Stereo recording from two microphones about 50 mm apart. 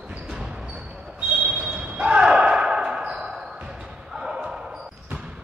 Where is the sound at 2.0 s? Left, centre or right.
Centre.